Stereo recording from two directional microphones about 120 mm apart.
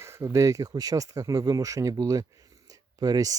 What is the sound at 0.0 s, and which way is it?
Speech, 20° right (ahead or behind).